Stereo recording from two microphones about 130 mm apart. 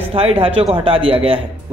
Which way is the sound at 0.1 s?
45° right (ahead or behind).